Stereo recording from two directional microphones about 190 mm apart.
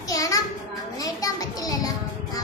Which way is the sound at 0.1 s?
15° left (ahead or behind).